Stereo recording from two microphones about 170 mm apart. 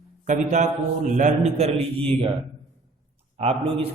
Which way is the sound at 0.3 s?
45° right (ahead or behind).